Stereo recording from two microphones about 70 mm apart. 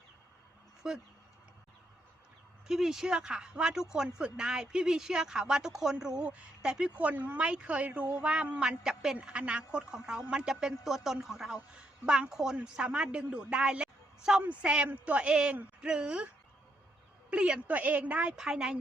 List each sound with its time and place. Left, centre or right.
0.8 s speech: centre
2.6 s speech: centre
7.0 s speech: right
9.1 s speech: centre